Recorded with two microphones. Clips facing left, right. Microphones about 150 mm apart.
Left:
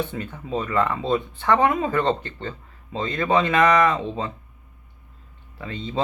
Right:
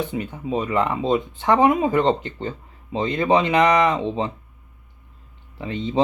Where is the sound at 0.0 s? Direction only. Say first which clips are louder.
Right 3 dB; 15° right (ahead or behind).